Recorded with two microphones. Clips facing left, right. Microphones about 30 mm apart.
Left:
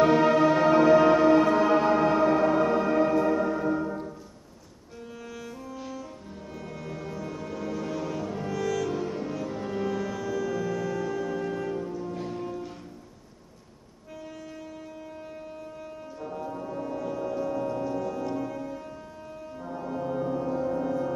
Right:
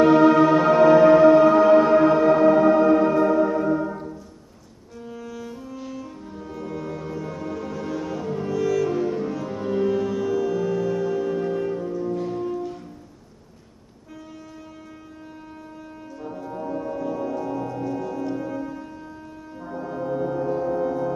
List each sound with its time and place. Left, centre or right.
0.0 s music: centre
5.2 s music: centre
16.2 s brass instrument: centre
17.6 s music: centre